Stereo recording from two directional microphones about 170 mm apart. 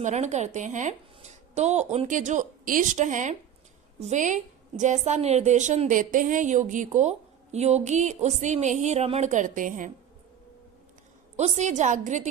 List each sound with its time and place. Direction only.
0.0 s a woman's voice: 45° right (ahead or behind)
11.3 s a woman's voice: 40° right (ahead or behind)